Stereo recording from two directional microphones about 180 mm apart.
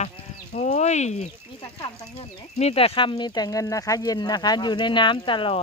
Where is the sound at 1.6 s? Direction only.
25° left (ahead or behind).